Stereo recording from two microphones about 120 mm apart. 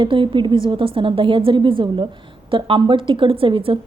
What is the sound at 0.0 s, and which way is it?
A woman's voice, 45° right (ahead or behind).